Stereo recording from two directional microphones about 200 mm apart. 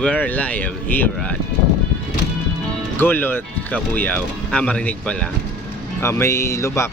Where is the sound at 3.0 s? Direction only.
10° left (ahead or behind).